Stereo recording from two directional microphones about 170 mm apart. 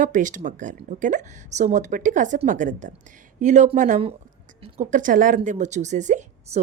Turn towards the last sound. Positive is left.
turn(degrees=-45)  # may be behind; listen again after turning